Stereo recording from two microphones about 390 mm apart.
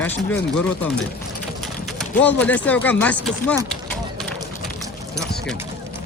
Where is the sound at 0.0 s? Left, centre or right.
Centre.